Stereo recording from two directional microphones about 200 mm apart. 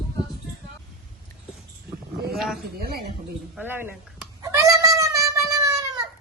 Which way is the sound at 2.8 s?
50° right (ahead or behind).